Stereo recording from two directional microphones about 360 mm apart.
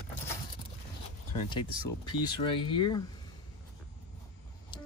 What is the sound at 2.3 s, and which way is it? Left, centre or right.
Speech, centre.